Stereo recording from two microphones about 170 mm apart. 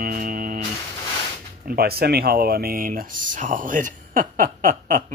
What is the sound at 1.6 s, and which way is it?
Speech, 65° right (ahead or behind).